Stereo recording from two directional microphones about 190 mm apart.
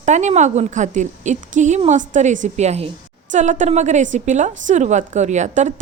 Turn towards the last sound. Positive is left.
turn(degrees=-40)  # may be behind; listen again after turning